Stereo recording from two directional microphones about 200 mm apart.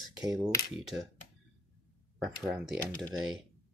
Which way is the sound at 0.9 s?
5° right (ahead or behind).